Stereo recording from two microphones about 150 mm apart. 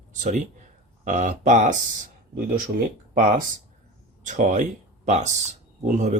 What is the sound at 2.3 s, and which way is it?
Speech, 75° right (ahead or behind).